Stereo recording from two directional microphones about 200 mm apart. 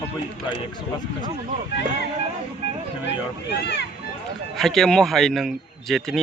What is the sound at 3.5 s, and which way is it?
Speech, 60° left (ahead or behind).